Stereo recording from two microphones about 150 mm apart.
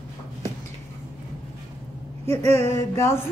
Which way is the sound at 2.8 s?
20° left (ahead or behind).